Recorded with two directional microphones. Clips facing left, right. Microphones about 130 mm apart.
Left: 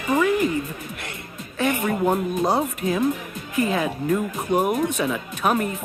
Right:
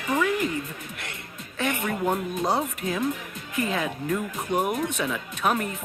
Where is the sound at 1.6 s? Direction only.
30° left (ahead or behind).